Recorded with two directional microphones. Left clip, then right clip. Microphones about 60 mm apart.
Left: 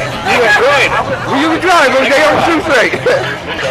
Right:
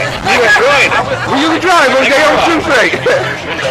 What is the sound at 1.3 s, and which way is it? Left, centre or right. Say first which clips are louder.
A man's voice: even; centre.